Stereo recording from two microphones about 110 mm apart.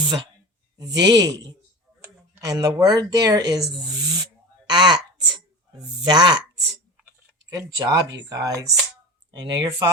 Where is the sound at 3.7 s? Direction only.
40° right (ahead or behind).